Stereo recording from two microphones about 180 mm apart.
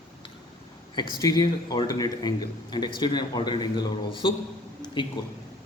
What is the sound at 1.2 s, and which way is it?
A man's voice, 20° left (ahead or behind).